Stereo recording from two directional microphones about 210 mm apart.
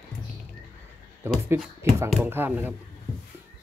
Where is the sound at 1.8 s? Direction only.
10° right (ahead or behind).